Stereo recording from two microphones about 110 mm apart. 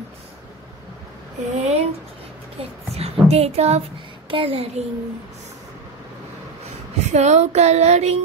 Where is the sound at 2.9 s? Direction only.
70° right (ahead or behind).